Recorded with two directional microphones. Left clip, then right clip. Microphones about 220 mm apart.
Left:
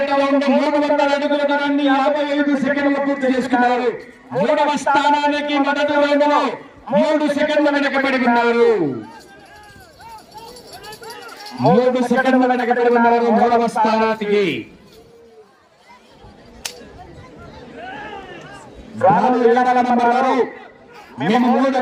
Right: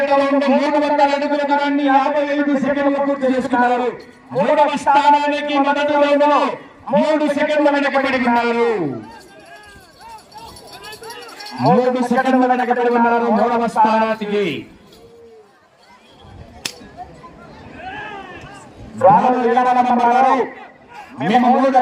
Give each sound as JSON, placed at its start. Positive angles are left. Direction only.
{"t": 0.0, "sound": "a man's voice", "side_deg": 10}
{"t": 10.1, "sound": "a sound", "side_deg": 0}
{"t": 11.7, "sound": "a man's voice", "side_deg": 15}
{"t": 12.7, "sound": "a man's voice", "side_deg": 35}
{"t": 13.1, "sound": "a man's voice", "side_deg": 15}
{"t": 16.6, "sound": "whip", "side_deg": -5}
{"t": 17.7, "sound": "vehicle", "side_deg": -5}
{"t": 18.9, "sound": "a man's voice", "side_deg": 35}
{"t": 19.4, "sound": "a man's voice", "side_deg": 20}
{"t": 20.6, "sound": "chatter", "side_deg": 0}
{"t": 21.2, "sound": "a man's voice", "side_deg": 20}